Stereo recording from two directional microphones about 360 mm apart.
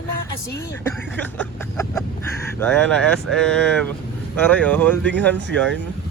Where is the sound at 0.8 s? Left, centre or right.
Centre.